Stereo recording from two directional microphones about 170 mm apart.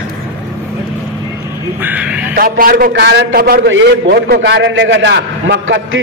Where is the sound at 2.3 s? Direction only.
60° right (ahead or behind); by 6.0 s 90° right.